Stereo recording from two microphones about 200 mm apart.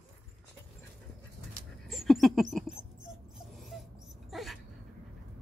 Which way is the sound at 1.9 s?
Centre (ahead or behind).